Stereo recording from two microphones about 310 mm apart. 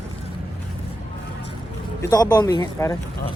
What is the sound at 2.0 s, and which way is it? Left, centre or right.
Speech, centre.